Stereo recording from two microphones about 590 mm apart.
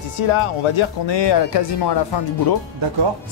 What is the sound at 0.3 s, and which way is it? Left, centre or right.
Speech, left.